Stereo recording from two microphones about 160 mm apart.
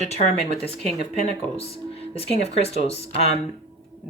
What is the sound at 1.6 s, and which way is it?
Speech, 40° left (ahead or behind).